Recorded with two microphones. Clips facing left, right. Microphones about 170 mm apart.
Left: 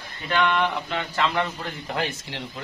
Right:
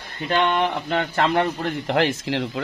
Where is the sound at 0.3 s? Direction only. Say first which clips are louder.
Right 2 dB; 35° right (ahead or behind).